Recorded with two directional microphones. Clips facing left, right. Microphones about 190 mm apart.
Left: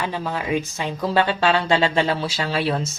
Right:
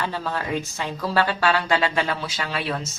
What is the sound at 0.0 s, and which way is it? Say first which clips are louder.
Speech: left 2 dB; 15° left (ahead or behind).